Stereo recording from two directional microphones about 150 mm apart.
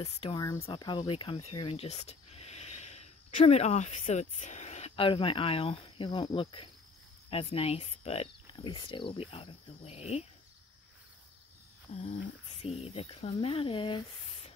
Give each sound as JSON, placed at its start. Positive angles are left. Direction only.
{"t": 0.0, "sound": "speech", "side_deg": 35}
{"t": 8.5, "sound": "speech", "side_deg": 30}
{"t": 11.9, "sound": "a sound", "side_deg": 60}
{"t": 12.6, "sound": "speech", "side_deg": 40}